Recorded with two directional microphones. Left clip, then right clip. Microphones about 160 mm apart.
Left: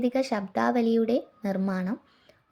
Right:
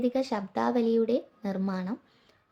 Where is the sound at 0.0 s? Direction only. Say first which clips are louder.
Left 2 dB; 15° left (ahead or behind).